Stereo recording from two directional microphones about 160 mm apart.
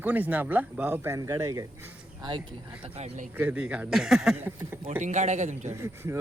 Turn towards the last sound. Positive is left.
turn(degrees=-15)  # may be behind; listen again after turning